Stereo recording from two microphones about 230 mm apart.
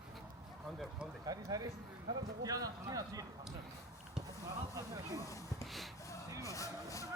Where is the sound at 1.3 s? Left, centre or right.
Centre.